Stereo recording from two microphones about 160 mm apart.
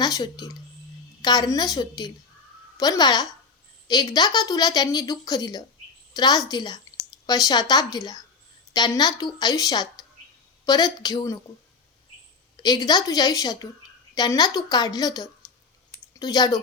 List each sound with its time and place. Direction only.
0.0 s speech: 25° left (ahead or behind)
12.6 s speech: 25° left (ahead or behind)
16.0 s a sound: 25° left (ahead or behind)